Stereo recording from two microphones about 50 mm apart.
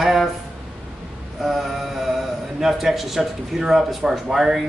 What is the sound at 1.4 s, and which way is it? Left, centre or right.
A man's voice, centre.